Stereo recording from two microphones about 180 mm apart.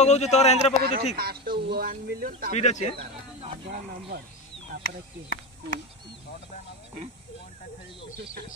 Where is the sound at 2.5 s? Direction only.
40° left (ahead or behind).